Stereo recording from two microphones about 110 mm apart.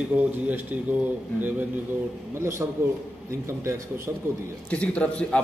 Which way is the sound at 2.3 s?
25° right (ahead or behind).